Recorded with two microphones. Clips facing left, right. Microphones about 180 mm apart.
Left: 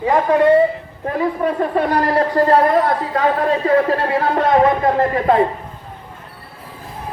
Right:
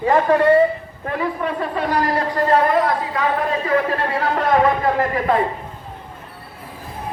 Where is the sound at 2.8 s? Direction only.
35° left (ahead or behind).